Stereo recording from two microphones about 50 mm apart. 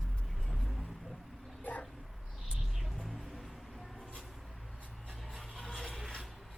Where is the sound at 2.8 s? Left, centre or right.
Centre.